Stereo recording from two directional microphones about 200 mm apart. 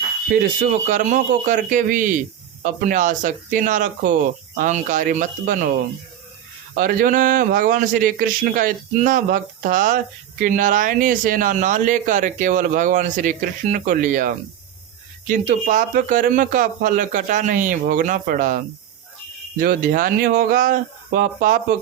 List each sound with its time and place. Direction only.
0.6 s speech: 40° right (ahead or behind)
6.7 s a man's voice: 45° right (ahead or behind)